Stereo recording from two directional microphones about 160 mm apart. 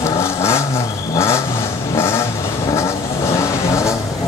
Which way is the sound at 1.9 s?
15° left (ahead or behind).